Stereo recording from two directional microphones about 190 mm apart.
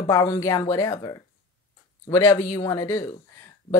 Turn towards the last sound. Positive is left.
turn(degrees=15)  # may be behind; listen again after turning